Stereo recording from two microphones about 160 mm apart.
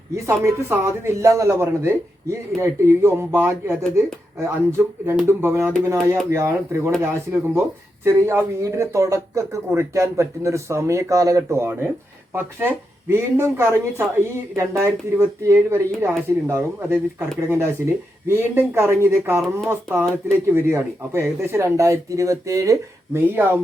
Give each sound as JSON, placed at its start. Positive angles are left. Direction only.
{"t": 0.3, "sound": "speech", "side_deg": -15}